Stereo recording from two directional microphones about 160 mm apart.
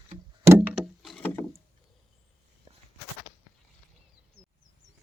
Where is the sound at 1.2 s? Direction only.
10° left (ahead or behind).